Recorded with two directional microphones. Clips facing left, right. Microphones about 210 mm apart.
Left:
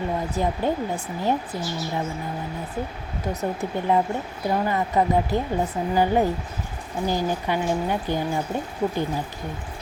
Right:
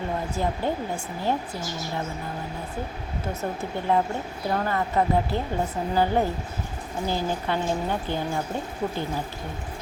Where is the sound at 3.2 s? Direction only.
15° left (ahead or behind).